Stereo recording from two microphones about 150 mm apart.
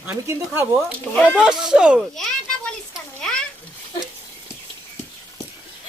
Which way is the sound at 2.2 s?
5° left (ahead or behind).